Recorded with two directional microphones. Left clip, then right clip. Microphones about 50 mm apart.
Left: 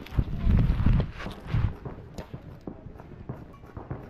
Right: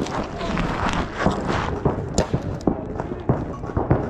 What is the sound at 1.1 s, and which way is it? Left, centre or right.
Clip-clop, left.